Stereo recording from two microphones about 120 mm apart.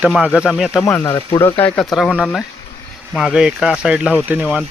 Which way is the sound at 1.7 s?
5° left (ahead or behind).